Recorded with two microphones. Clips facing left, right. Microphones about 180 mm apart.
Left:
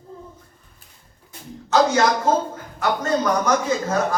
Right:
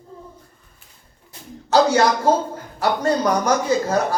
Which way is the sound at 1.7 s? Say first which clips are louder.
Right 2 dB; 35° right (ahead or behind).